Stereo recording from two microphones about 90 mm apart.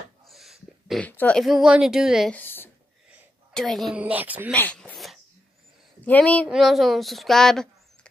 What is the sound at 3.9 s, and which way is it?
Speech, 15° right (ahead or behind).